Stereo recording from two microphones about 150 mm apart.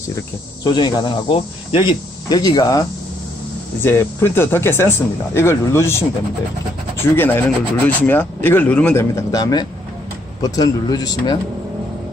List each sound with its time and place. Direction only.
0.6 s speech: 30° left (ahead or behind)
3.8 s speech: 15° left (ahead or behind)
7.2 s speech: 15° left (ahead or behind)